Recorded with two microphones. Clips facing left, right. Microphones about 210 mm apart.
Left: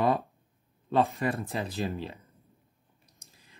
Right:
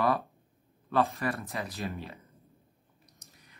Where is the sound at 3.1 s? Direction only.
30° left (ahead or behind).